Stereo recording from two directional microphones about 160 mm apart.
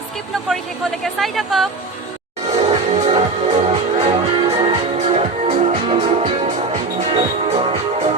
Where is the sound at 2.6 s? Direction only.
35° right (ahead or behind).